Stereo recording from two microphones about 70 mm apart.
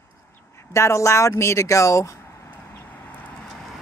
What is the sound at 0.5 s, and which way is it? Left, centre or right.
Speech, left.